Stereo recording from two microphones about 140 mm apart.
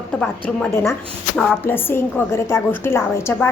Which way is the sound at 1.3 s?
10° left (ahead or behind).